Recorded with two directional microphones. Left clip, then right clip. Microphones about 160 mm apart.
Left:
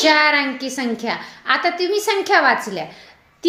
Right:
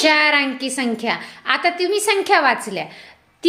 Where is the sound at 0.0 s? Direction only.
20° right (ahead or behind).